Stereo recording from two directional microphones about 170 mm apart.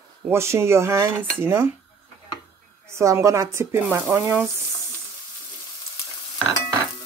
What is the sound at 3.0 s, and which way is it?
Cutlery, 15° right (ahead or behind).